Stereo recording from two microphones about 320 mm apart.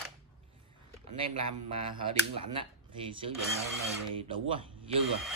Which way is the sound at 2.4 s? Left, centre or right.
Centre.